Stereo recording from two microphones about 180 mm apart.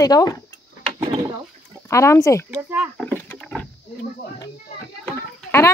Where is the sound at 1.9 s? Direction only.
15° left (ahead or behind).